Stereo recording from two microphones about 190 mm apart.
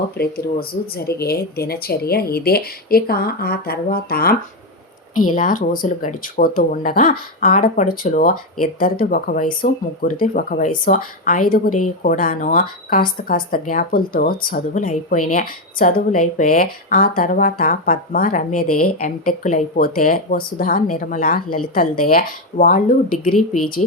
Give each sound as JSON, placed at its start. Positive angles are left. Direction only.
{"t": 0.2, "sound": "speech", "side_deg": 50}